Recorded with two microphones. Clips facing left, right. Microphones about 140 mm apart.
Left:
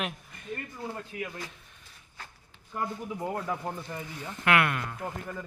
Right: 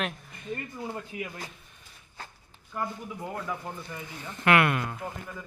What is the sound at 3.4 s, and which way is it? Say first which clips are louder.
Speech: left 2 dB; 30° left (ahead or behind).